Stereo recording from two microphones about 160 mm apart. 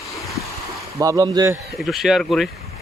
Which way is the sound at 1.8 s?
Centre (ahead or behind).